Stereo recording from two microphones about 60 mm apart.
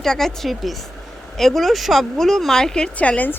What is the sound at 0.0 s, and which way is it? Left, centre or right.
Speech, centre.